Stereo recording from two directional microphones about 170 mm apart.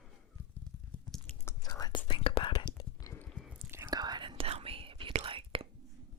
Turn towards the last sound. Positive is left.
turn(degrees=-30)  # may be behind; listen again after turning